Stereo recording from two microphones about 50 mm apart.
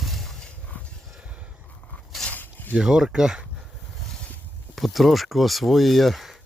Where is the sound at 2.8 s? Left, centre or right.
Centre.